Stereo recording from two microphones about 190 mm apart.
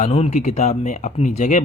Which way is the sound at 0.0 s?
35° left (ahead or behind).